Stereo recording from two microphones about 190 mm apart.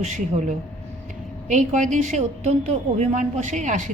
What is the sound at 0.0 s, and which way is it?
A woman's voice, 40° right (ahead or behind).